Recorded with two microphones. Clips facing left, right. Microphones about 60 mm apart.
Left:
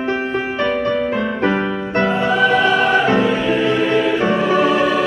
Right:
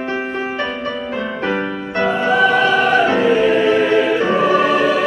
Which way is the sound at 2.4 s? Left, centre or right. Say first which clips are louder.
Left 2 dB; left.